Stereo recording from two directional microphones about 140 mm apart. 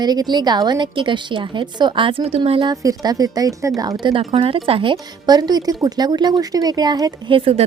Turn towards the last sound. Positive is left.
turn(degrees=-40)  # may be behind; listen again after turning